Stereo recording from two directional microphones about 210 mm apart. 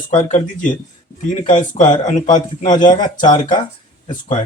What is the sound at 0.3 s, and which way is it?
Speech, 35° left (ahead or behind).